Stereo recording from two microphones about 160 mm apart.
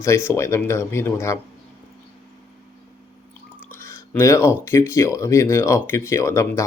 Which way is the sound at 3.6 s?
15° left (ahead or behind).